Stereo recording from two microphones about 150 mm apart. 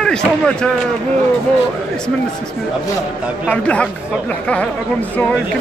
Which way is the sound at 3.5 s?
10° left (ahead or behind).